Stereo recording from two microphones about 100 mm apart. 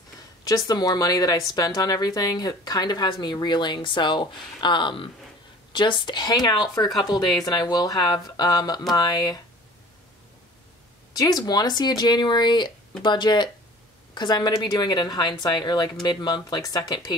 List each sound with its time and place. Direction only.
0.5 s speech: 40° left (ahead or behind)
11.1 s speech: 40° left (ahead or behind)